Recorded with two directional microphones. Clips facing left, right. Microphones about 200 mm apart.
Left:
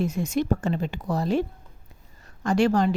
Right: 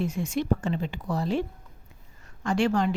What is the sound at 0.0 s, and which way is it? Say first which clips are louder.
Speech: left 3 dB; 40° left (ahead or behind).